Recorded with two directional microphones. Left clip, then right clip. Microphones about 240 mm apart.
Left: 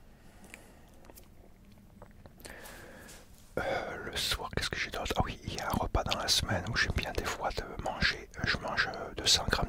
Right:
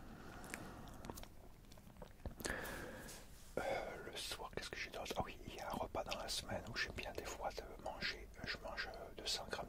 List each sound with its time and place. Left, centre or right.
3.5 s whispering: left